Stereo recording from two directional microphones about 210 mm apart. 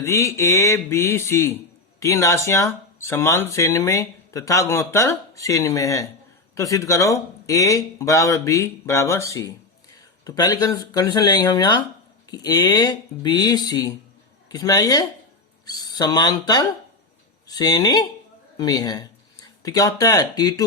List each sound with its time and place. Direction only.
0.0 s speech: 15° left (ahead or behind)